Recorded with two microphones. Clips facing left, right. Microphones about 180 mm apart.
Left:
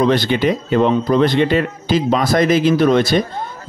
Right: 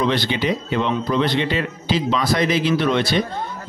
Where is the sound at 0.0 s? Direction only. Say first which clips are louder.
Left 6 dB; 45° left (ahead or behind).